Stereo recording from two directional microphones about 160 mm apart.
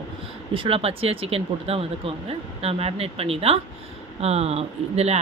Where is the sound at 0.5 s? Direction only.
35° right (ahead or behind).